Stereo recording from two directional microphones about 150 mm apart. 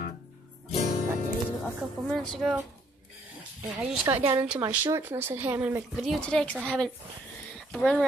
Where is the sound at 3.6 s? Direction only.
5° right (ahead or behind).